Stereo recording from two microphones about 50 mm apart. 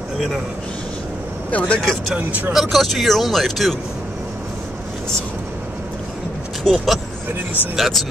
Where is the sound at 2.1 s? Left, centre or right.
Right.